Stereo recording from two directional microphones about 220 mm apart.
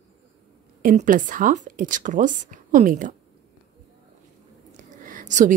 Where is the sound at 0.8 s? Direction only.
35° right (ahead or behind).